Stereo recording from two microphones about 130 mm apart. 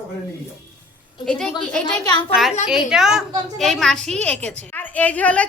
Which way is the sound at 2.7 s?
5° right (ahead or behind).